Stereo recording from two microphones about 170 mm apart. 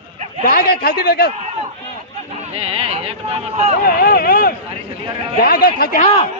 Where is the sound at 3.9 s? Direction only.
60° left (ahead or behind).